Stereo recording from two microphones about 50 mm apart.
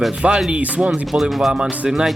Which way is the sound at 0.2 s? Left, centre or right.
Right.